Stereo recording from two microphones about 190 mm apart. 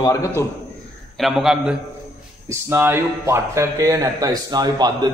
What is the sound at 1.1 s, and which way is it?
A man's voice, centre (ahead or behind).